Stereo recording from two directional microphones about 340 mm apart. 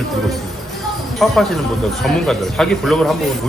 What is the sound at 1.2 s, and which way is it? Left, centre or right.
Speech, centre.